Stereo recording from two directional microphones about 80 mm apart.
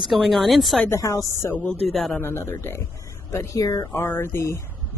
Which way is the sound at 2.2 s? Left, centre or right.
Left.